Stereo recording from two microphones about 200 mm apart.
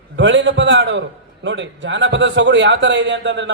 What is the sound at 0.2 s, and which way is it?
A man's voice, 65° right (ahead or behind).